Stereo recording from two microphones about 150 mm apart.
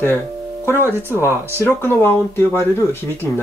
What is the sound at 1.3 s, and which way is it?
Speech, 15° right (ahead or behind).